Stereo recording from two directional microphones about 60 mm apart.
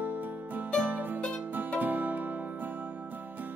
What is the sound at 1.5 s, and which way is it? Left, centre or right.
Music, right.